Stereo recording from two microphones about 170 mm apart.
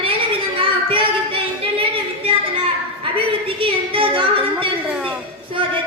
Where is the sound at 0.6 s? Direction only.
30° right (ahead or behind).